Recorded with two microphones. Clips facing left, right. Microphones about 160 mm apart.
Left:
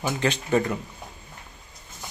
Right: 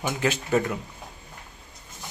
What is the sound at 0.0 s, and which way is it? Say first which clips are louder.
Speech: left 1 dB; 5° right (ahead or behind).